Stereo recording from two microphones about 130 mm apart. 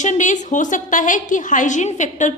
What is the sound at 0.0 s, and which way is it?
A woman's voice, 70° left (ahead or behind).